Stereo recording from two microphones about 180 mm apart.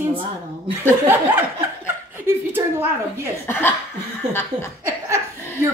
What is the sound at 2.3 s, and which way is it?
Speech, 15° right (ahead or behind).